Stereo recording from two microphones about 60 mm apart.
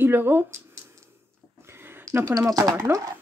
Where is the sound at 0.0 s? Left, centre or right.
Right.